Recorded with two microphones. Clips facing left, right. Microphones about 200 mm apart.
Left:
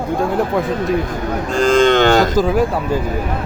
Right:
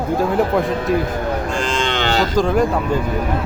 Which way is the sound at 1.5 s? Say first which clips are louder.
Left 9 dB; 40° left (ahead or behind).